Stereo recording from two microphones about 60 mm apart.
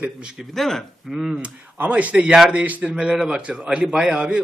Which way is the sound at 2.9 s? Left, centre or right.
Centre.